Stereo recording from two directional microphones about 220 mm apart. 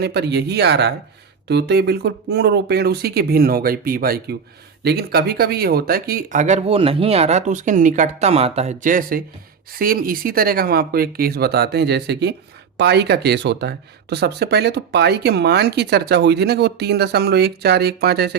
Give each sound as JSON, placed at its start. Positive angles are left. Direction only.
{"t": 0.0, "sound": "speech", "side_deg": -50}